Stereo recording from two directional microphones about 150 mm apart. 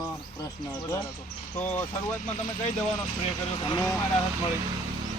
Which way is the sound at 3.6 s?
25° left (ahead or behind).